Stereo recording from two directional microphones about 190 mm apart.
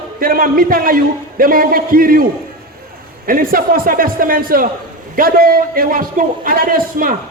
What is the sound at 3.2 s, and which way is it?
A man's voice, 50° right (ahead or behind).